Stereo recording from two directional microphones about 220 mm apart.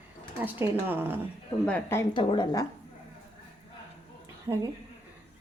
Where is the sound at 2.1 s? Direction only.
20° left (ahead or behind).